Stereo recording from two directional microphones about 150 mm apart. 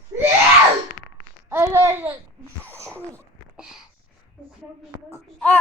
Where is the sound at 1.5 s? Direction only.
15° right (ahead or behind).